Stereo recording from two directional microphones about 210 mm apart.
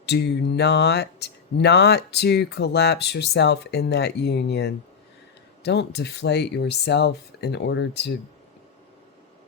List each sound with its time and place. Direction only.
0.0 s speech: 50° left (ahead or behind)